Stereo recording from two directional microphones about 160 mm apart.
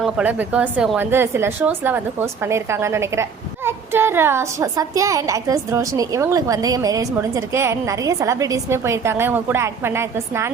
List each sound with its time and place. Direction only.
0.0 s a woman's voice: 10° right (ahead or behind)